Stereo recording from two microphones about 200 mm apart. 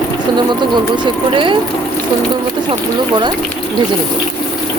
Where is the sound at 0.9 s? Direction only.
25° right (ahead or behind).